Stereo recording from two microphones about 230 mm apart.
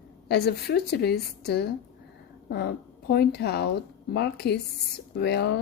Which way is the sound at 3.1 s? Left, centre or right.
Left.